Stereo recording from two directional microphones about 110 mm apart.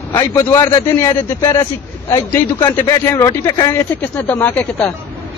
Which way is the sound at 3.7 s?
20° left (ahead or behind).